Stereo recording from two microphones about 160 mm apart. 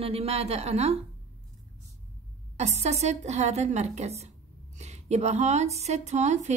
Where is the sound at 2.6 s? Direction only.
45° right (ahead or behind).